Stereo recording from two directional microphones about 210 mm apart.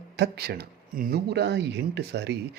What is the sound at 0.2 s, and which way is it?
Speech, 50° right (ahead or behind).